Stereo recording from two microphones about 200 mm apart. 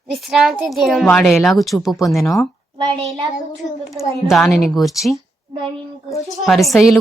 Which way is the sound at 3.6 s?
Centre (ahead or behind).